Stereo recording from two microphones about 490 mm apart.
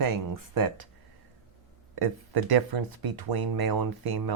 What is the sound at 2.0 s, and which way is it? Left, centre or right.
Speech, right.